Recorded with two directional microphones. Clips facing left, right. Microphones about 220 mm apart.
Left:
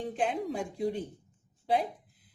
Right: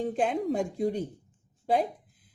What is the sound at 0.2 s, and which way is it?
A woman's voice, 40° right (ahead or behind).